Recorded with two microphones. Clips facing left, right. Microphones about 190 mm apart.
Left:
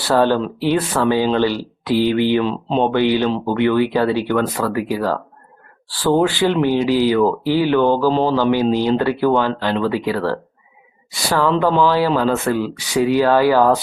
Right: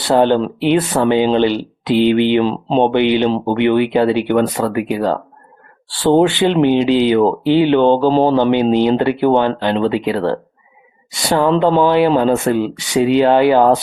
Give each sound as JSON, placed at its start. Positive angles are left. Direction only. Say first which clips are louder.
{"t": 0.1, "sound": "speech", "louder": "right 3 dB", "side_deg": -20}
{"t": 2.4, "sound": "speech", "louder": "right 4 dB", "side_deg": -35}
{"t": 2.8, "sound": "speech", "louder": "right 2 dB", "side_deg": -20}